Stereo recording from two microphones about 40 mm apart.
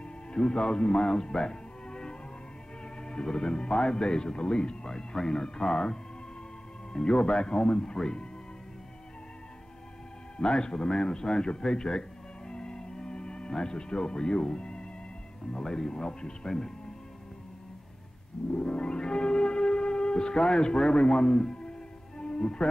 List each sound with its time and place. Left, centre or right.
0.3 s speech: left
10.4 s a man's voice: left
18.5 s music: centre